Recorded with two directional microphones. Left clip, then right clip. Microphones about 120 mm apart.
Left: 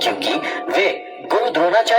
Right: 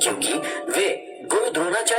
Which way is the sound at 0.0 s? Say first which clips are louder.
Left 5 dB; 30° left (ahead or behind).